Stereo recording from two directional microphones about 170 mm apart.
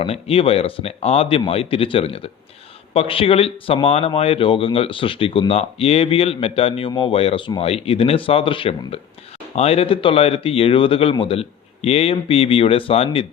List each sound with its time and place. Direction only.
0.0 s speech: 35° left (ahead or behind)